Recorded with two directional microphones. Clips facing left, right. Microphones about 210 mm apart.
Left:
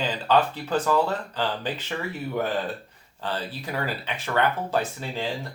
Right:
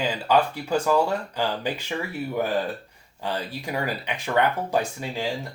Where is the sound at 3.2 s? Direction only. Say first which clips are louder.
Right 1 dB; 10° right (ahead or behind).